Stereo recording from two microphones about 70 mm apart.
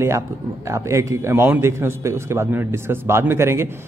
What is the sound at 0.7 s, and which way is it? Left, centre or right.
A man's voice, right.